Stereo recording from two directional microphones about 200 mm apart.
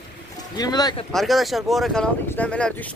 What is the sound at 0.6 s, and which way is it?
Speech, 20° left (ahead or behind).